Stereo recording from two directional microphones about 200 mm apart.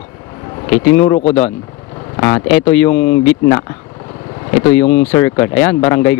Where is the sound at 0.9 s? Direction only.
20° left (ahead or behind).